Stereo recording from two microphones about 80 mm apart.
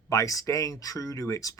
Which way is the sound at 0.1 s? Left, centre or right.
Left.